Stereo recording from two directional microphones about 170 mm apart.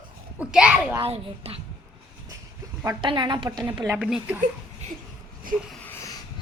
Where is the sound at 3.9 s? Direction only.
10° right (ahead or behind).